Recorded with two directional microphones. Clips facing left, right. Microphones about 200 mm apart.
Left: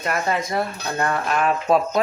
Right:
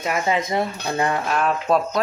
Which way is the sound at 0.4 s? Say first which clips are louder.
Right 1 dB; 20° right (ahead or behind).